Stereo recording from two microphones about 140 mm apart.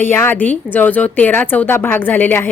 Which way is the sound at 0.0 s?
15° left (ahead or behind).